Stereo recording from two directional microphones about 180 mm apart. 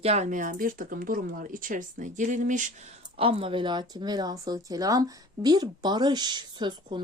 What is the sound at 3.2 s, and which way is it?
Speech, 30° right (ahead or behind).